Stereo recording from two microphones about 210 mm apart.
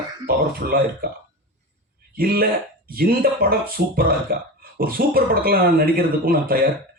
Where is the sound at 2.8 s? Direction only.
45° right (ahead or behind).